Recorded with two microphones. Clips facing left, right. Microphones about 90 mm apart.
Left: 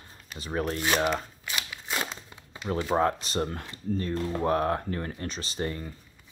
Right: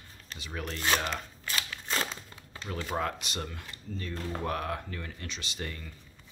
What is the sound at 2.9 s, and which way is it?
Speech, 30° left (ahead or behind).